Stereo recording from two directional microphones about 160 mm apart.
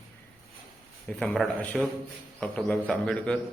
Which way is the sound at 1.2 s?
5° left (ahead or behind).